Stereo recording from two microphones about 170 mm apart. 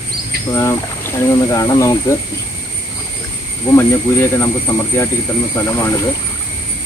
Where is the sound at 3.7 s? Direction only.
15° left (ahead or behind).